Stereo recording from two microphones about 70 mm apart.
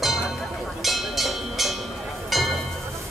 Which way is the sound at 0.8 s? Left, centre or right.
Centre.